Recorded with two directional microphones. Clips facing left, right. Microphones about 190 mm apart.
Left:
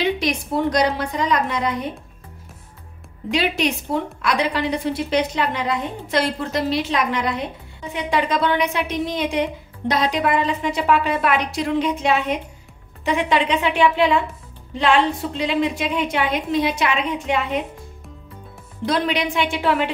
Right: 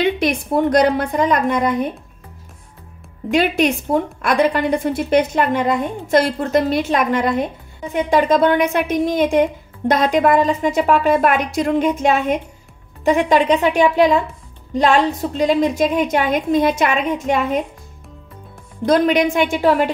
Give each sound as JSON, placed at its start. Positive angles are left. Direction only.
{"t": 0.0, "sound": "a woman's voice", "side_deg": -55}
{"t": 3.3, "sound": "a woman's voice", "side_deg": -50}
{"t": 18.9, "sound": "a woman's voice", "side_deg": -45}